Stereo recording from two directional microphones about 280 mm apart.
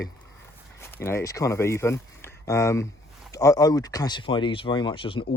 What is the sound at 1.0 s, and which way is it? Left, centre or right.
Speech, centre.